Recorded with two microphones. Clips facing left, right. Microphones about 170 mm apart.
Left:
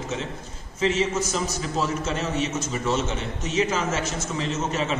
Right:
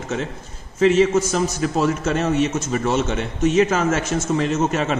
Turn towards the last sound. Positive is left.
turn(degrees=-55)  # may be behind; listen again after turning